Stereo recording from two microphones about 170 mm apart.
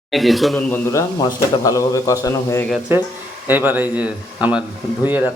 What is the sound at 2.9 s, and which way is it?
A man's voice, 15° right (ahead or behind).